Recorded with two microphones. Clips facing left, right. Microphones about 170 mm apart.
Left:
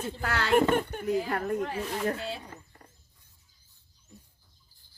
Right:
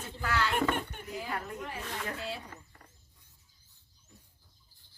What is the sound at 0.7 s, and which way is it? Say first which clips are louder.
Speech: left 7 dB; 45° left (ahead or behind).